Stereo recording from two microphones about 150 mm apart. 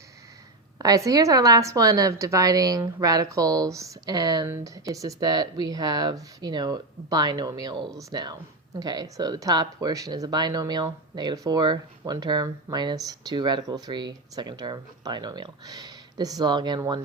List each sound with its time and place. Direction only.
0.8 s speech: 25° right (ahead or behind)